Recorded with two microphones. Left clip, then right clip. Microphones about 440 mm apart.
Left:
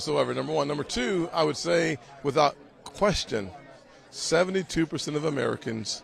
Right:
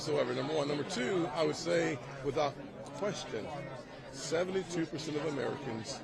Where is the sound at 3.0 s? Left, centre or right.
Left.